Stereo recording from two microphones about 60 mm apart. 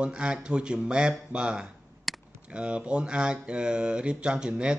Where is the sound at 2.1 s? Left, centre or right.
Centre.